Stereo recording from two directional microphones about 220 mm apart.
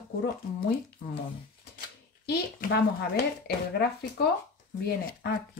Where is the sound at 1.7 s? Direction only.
45° left (ahead or behind).